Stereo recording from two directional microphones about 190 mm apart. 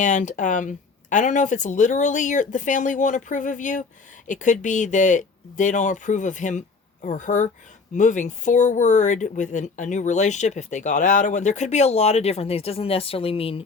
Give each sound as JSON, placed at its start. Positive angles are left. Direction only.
{"t": 0.0, "sound": "speech", "side_deg": 40}